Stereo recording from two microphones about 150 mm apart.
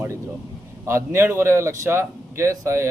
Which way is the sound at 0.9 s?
15° right (ahead or behind).